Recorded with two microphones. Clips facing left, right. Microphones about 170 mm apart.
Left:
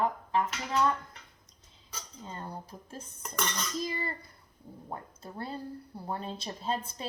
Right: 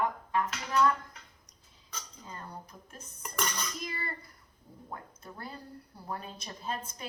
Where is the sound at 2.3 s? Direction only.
30° left (ahead or behind).